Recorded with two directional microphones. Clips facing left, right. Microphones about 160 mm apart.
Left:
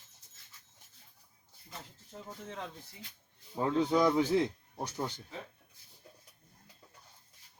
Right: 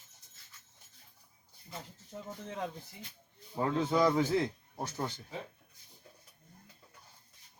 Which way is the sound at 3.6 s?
15° left (ahead or behind).